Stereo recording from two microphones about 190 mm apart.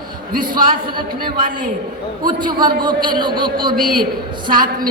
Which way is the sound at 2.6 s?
45° right (ahead or behind).